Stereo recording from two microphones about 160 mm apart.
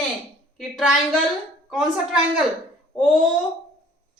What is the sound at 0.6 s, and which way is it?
A woman's voice, centre (ahead or behind).